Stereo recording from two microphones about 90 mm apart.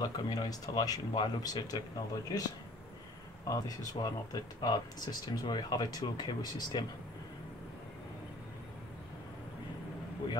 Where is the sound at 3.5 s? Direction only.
40° left (ahead or behind).